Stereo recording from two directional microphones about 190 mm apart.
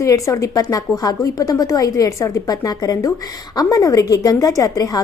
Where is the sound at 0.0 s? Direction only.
15° left (ahead or behind).